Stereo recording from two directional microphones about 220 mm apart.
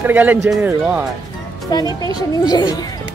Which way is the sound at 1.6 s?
15° left (ahead or behind).